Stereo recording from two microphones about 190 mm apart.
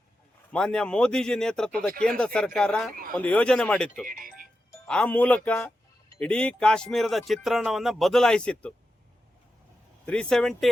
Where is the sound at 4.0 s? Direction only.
45° right (ahead or behind).